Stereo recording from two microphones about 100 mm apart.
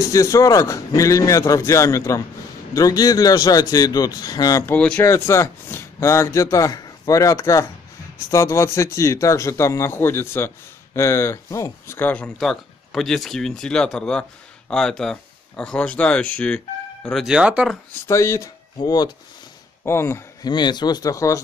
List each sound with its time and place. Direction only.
0.1 s speech: 35° left (ahead or behind)
4.6 s speech: 15° left (ahead or behind)
5.0 s a man's voice: 25° left (ahead or behind)
12.0 s speech: 15° left (ahead or behind)
12.4 s speech: 5° left (ahead or behind)
17.3 s speech: 10° right (ahead or behind)
18.0 s a man's voice: 30° left (ahead or behind)
18.8 s speech: 45° left (ahead or behind)
19.8 s speech: 25° left (ahead or behind)
20.4 s speech: 45° left (ahead or behind)